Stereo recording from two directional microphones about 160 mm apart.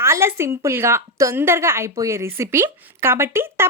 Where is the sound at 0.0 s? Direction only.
15° right (ahead or behind).